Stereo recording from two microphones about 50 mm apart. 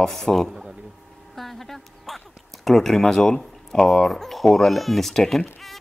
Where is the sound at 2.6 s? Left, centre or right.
Centre.